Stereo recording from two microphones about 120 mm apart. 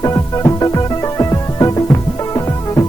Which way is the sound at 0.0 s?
30° left (ahead or behind).